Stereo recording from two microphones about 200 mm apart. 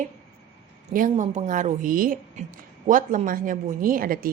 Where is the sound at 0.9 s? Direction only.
35° right (ahead or behind).